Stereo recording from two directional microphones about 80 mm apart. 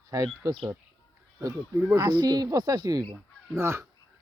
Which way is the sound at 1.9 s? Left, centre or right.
Right.